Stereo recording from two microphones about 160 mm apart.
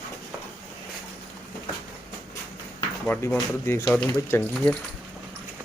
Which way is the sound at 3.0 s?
10° left (ahead or behind).